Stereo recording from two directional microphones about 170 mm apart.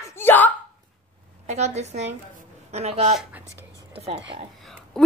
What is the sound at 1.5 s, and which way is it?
A woman's voice, 40° right (ahead or behind).